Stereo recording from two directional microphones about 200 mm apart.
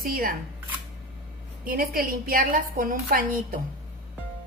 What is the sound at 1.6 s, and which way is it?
A woman's voice, 45° right (ahead or behind).